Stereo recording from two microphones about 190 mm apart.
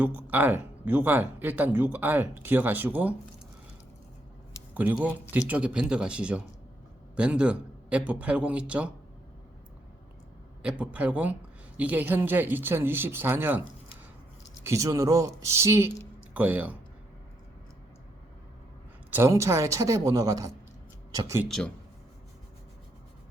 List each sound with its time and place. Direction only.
0.0 s speech: 10° right (ahead or behind)
4.7 s speech: 10° right (ahead or behind)
10.6 s speech: 5° right (ahead or behind)
14.6 s speech: 15° right (ahead or behind)
19.1 s speech: 15° right (ahead or behind)
21.4 s speech: centre (ahead or behind)